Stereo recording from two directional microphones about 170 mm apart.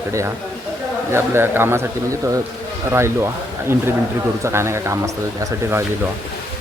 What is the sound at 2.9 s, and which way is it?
Speech, 15° right (ahead or behind).